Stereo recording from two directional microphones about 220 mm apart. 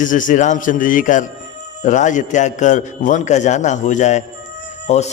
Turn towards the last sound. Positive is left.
turn(degrees=30)  # may be behind; listen again after turning